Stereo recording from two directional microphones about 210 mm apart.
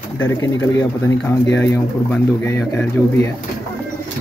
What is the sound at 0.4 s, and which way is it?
Speech, 10° left (ahead or behind).